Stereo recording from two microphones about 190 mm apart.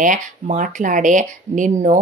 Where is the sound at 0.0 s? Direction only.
45° right (ahead or behind).